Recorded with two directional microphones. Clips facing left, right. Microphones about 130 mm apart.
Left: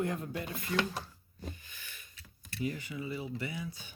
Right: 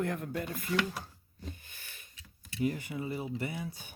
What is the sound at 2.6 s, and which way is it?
Speech, 55° right (ahead or behind).